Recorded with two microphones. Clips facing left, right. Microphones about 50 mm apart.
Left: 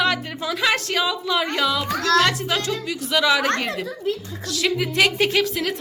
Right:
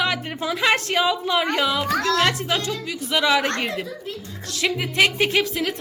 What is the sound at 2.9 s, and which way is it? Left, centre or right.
A woman's voice, centre.